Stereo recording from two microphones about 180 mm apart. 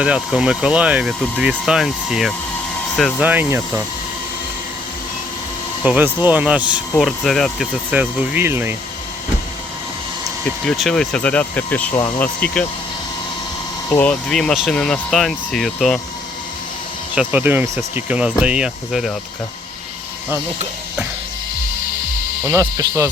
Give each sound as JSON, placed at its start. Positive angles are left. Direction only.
{"t": 0.0, "sound": "speech", "side_deg": -5}
{"t": 3.2, "sound": "speech", "side_deg": -10}
{"t": 5.8, "sound": "speech", "side_deg": -10}
{"t": 7.9, "sound": "speech", "side_deg": -10}
{"t": 10.4, "sound": "speech", "side_deg": 0}
{"t": 11.9, "sound": "speech", "side_deg": 25}
{"t": 12.2, "sound": "speech", "side_deg": 10}
{"t": 13.9, "sound": "speech", "side_deg": 5}
{"t": 17.2, "sound": "speech", "side_deg": -10}
{"t": 22.4, "sound": "speech", "side_deg": -15}